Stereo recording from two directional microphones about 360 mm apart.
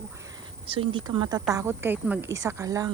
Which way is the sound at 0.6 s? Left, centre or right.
Centre.